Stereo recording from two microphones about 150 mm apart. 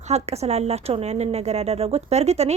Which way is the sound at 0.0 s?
45° right (ahead or behind).